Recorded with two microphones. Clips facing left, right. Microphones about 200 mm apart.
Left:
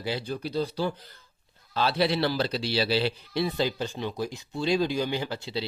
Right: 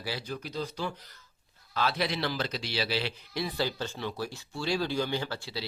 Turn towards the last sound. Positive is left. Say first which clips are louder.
# left 3 dB
turn(degrees=20)  # may be behind; listen again after turning